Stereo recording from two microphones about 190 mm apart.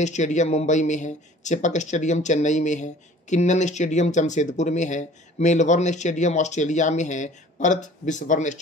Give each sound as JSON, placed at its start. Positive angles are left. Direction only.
{"t": 0.0, "sound": "speech", "side_deg": 40}